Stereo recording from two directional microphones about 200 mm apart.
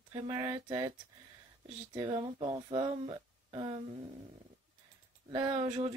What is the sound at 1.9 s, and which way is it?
Speech, 25° right (ahead or behind).